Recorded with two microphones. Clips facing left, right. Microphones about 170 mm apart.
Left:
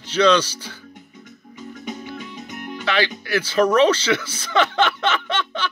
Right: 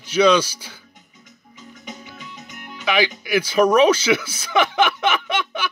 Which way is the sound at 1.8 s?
50° left (ahead or behind).